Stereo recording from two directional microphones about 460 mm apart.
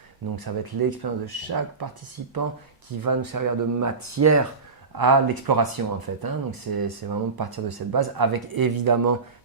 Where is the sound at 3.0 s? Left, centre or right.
Right.